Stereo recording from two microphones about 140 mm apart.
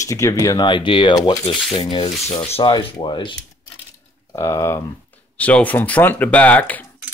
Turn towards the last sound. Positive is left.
turn(degrees=10)  # may be behind; listen again after turning